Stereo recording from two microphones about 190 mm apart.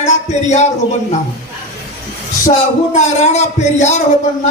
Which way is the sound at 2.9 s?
35° left (ahead or behind).